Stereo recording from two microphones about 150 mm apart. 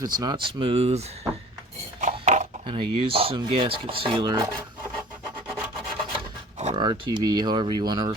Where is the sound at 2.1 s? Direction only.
50° right (ahead or behind).